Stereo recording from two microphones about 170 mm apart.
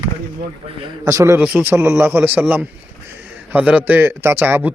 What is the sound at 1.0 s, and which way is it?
A man's voice, 15° right (ahead or behind).